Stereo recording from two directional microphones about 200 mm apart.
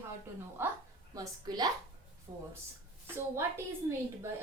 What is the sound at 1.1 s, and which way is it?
A woman's voice, 20° right (ahead or behind).